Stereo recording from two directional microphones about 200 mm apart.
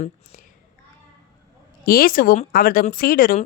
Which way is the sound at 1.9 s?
45° left (ahead or behind).